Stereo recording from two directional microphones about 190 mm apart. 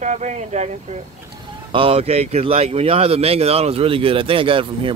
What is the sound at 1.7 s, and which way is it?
Speech, 30° right (ahead or behind).